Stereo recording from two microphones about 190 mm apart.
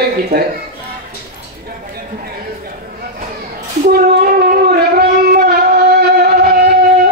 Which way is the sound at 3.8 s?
50° right (ahead or behind).